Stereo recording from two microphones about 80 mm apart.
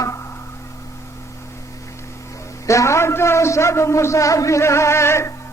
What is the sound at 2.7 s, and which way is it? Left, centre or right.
A man's voice, left.